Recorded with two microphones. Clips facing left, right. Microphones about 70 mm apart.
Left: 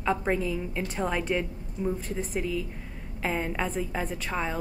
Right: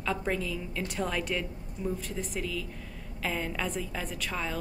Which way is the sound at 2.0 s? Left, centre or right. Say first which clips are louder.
Left 4 dB; left.